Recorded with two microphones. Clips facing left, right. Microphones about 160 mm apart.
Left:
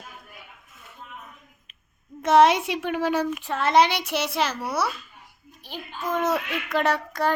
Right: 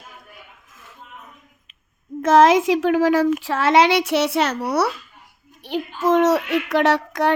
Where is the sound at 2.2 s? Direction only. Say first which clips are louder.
Right 4 dB; 90° right.